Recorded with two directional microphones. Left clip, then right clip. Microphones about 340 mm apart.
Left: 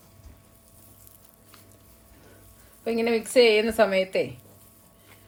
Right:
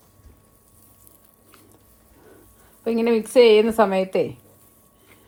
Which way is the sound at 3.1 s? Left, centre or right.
Centre.